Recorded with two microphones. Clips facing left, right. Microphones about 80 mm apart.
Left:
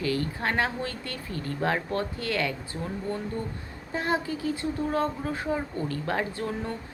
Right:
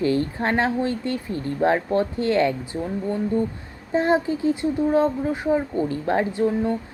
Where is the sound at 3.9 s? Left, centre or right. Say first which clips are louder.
Right 8 dB; right.